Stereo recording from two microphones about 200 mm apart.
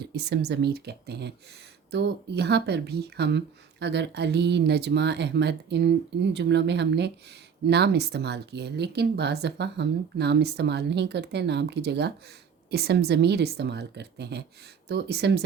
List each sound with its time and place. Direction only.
0.0 s speech: 55° right (ahead or behind)